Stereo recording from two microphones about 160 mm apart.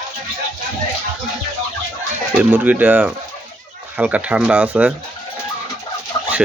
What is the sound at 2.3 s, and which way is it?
Speech, 10° right (ahead or behind).